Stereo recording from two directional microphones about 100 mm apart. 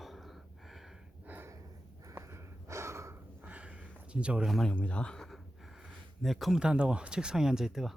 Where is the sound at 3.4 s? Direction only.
15° right (ahead or behind).